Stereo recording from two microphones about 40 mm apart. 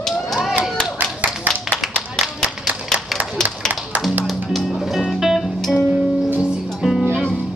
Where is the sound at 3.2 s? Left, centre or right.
Centre.